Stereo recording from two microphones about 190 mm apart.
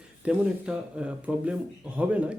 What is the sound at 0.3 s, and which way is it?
Speech, 5° right (ahead or behind).